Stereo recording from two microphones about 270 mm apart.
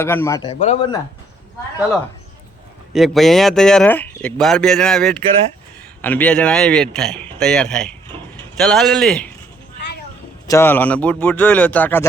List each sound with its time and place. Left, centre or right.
0.0 s a man's voice: centre
2.9 s speech: centre
10.4 s speech: centre